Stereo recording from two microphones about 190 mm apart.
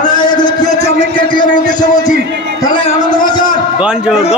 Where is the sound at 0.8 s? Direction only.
25° left (ahead or behind).